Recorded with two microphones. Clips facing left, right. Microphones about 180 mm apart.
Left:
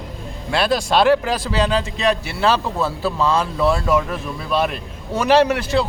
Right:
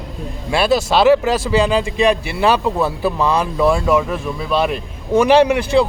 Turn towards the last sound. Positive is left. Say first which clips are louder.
# right 3 dB
turn(degrees=-10)  # may be behind; listen again after turning